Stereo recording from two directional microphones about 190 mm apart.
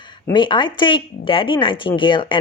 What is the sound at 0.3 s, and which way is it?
Speech, 25° left (ahead or behind).